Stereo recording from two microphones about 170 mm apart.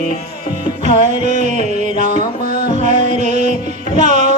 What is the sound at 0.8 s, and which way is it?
Music, 45° right (ahead or behind).